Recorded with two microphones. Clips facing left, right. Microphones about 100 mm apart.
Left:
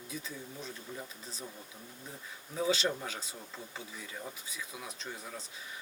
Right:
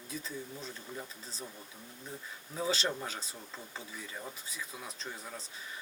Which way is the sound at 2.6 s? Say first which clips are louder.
Left 2 dB; 35° right (ahead or behind).